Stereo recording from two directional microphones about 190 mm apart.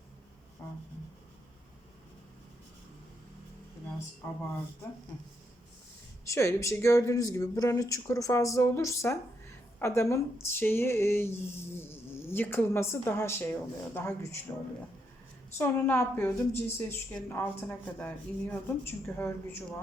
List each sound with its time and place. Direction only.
6.2 s speech: 15° left (ahead or behind)